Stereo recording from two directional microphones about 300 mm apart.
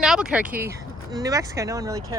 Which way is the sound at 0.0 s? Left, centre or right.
Centre.